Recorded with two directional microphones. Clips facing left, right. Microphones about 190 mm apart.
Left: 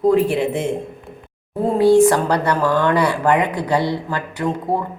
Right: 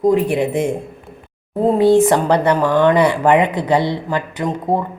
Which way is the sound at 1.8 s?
20° right (ahead or behind).